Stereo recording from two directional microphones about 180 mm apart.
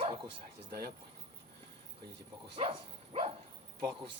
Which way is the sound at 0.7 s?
60° right (ahead or behind).